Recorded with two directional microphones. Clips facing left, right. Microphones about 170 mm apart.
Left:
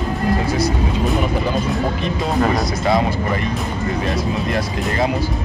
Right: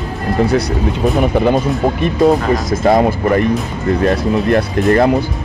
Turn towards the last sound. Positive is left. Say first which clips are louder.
# right 8 dB
turn(degrees=-55)  # may be behind; listen again after turning